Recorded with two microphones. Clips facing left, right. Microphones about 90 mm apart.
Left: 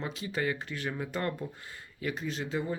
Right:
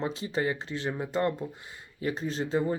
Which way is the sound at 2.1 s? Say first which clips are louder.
Right 5 dB; 35° right (ahead or behind).